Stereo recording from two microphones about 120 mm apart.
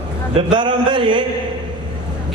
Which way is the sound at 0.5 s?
40° right (ahead or behind).